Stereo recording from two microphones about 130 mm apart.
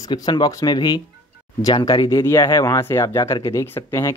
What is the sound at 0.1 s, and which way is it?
Speech, 35° left (ahead or behind).